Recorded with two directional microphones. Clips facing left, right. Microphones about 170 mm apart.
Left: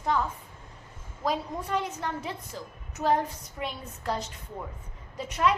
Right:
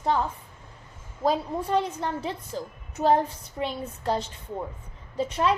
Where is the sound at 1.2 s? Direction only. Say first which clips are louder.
Right 5 dB; 30° right (ahead or behind).